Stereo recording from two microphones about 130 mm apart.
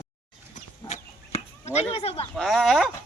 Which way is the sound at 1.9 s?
50° left (ahead or behind).